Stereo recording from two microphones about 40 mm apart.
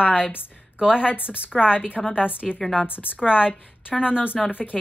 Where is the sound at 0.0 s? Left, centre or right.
Right.